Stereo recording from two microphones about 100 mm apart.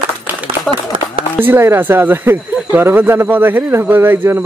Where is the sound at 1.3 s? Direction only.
20° right (ahead or behind).